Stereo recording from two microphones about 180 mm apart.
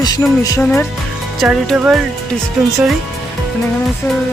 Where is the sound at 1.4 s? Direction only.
Centre (ahead or behind).